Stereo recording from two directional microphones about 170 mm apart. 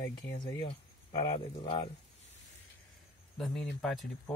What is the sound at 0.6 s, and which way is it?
Speech, 30° left (ahead or behind).